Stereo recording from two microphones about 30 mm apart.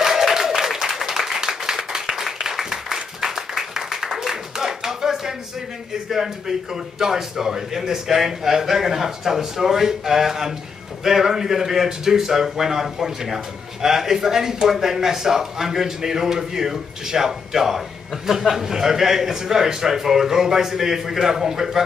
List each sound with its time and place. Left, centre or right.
0.0 s applause: centre
2.0 s clapping: centre
2.7 s a sound: centre
6.0 s a man's voice: centre